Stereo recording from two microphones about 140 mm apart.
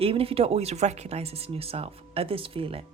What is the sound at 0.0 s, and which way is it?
Speech, 40° right (ahead or behind).